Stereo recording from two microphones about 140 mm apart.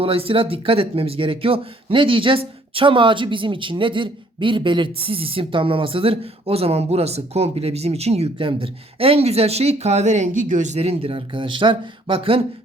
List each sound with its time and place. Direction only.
0.0 s speech: 40° right (ahead or behind)